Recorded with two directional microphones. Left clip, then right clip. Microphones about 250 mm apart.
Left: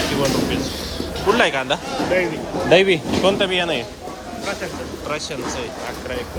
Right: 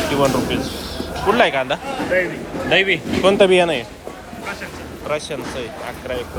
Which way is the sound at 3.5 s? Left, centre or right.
Centre.